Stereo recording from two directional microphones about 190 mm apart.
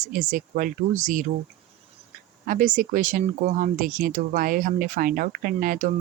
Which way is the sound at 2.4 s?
45° right (ahead or behind).